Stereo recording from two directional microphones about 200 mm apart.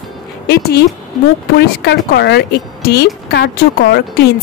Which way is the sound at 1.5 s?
55° left (ahead or behind).